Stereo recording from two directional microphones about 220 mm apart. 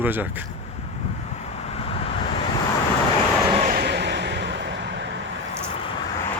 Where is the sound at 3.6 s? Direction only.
35° right (ahead or behind).